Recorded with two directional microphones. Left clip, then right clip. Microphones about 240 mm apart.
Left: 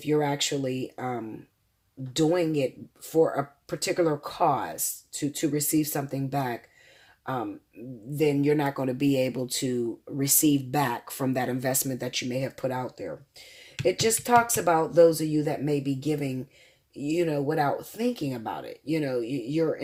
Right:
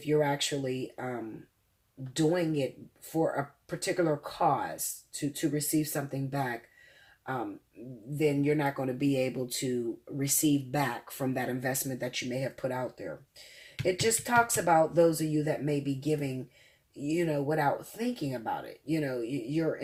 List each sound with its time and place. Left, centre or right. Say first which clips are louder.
0.0 s speech: left 2 dB; left
2.1 s speech: left 4 dB; left
8.1 s speech: left 4 dB; left